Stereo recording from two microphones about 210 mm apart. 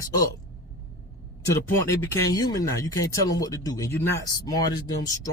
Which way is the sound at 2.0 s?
15° left (ahead or behind).